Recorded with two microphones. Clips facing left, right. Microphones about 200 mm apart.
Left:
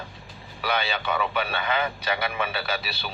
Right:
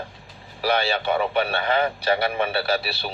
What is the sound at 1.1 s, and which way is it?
A man's voice, 40° right (ahead or behind).